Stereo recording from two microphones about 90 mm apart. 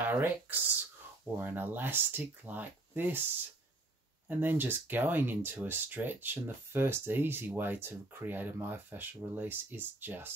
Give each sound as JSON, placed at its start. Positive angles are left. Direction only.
{"t": 0.0, "sound": "speech", "side_deg": -20}
{"t": 4.3, "sound": "speech", "side_deg": -20}